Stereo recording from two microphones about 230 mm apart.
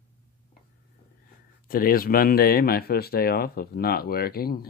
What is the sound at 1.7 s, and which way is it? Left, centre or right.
Speech, left.